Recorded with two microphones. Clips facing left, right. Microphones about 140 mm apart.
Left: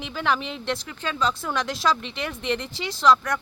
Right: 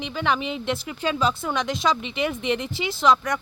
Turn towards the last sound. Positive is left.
turn(degrees=0)  # may be behind; listen again after turning